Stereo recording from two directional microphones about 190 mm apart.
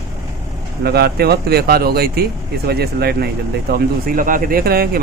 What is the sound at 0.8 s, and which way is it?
Speech, 55° right (ahead or behind).